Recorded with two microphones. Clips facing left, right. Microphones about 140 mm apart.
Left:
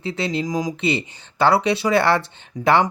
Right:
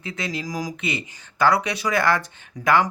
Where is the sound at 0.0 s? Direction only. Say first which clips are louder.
Left 6 dB; 30° left (ahead or behind).